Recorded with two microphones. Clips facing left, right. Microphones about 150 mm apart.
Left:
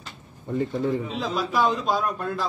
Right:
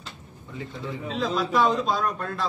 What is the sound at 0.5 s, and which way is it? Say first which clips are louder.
Speech: left 10 dB; 55° left (ahead or behind).